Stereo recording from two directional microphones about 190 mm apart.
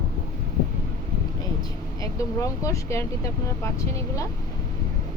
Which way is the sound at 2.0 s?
15° left (ahead or behind).